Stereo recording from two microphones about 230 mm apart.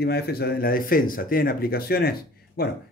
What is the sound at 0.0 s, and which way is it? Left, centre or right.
Speech, left.